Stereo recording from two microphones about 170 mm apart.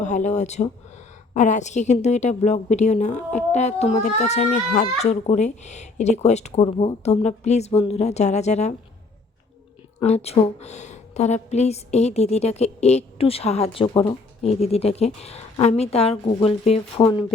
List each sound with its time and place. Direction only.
0.0 s a woman's voice: 45° left (ahead or behind)
10.0 s a woman's voice: 40° left (ahead or behind)